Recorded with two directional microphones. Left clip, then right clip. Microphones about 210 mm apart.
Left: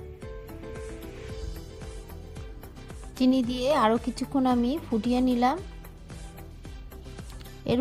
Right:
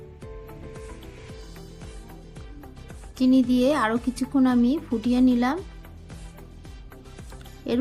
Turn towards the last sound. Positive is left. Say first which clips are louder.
# right 1 dB
turn(degrees=45)  # may be behind; listen again after turning